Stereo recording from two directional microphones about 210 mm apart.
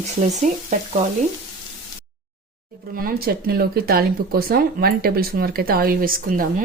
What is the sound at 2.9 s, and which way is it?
Speech, 45° right (ahead or behind).